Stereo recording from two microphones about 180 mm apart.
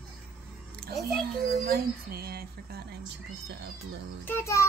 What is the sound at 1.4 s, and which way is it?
Speech, 45° right (ahead or behind).